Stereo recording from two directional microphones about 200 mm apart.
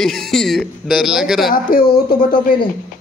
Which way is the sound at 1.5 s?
45° left (ahead or behind).